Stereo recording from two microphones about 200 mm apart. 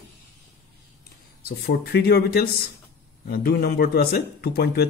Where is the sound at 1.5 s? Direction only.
50° left (ahead or behind).